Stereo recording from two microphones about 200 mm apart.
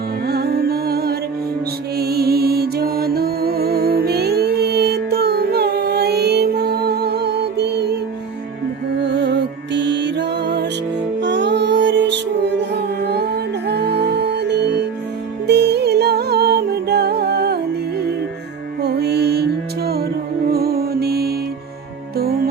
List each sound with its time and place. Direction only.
0.3 s music: 50° right (ahead or behind)
9.0 s music: 60° right (ahead or behind)